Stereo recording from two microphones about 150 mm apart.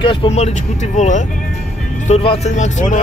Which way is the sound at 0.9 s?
55° left (ahead or behind).